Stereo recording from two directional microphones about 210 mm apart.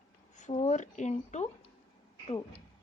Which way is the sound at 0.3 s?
35° left (ahead or behind).